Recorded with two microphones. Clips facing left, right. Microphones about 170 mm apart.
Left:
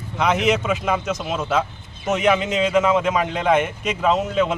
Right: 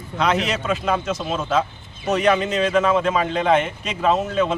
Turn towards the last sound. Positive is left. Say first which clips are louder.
# even
turn(degrees=10)  # may be behind; listen again after turning